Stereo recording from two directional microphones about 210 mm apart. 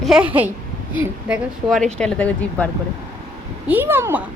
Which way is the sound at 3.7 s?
10° right (ahead or behind).